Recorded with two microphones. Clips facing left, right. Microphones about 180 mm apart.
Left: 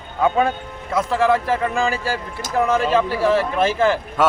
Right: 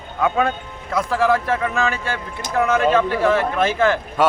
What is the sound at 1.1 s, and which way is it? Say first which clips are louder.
Speech: even; centre (ahead or behind).